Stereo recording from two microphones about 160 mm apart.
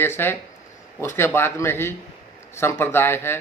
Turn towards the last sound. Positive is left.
turn(degrees=15)  # may be behind; listen again after turning